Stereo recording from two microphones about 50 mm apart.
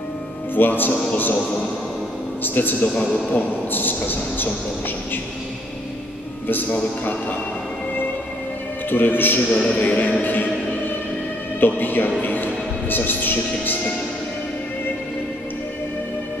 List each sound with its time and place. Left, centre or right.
0.6 s speech: left
2.4 s speech: left
6.4 s speech: left
8.9 s speech: left
11.6 s speech: left